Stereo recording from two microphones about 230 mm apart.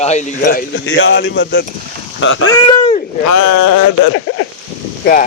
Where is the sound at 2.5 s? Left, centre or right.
Left.